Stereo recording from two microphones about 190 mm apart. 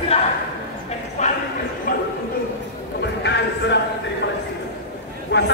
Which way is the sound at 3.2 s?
65° left (ahead or behind).